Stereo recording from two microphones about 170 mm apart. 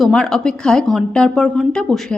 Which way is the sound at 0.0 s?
5° left (ahead or behind).